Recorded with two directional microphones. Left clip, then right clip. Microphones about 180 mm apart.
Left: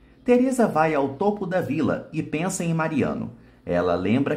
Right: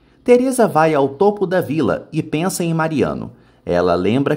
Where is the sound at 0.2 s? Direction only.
35° right (ahead or behind).